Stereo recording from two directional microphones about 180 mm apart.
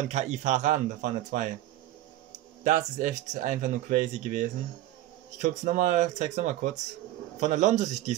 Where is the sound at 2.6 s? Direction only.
40° right (ahead or behind).